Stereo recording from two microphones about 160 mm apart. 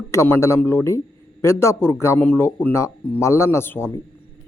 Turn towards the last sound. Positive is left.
turn(degrees=15)  # may be behind; listen again after turning